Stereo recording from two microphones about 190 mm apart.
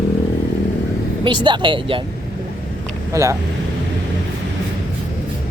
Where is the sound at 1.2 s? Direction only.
25° right (ahead or behind).